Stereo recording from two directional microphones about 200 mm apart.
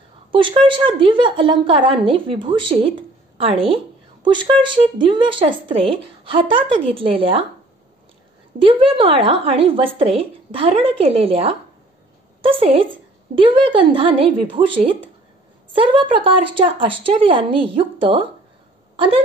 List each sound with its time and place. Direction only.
0.3 s speech: 25° right (ahead or behind)
8.5 s speech: 25° right (ahead or behind)